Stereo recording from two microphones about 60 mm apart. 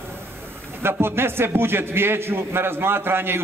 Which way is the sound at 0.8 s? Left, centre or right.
Right.